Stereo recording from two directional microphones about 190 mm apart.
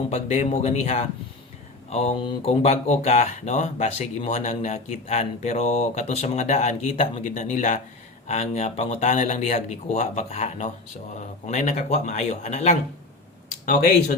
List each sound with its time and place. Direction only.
0.1 s speech: 30° left (ahead or behind)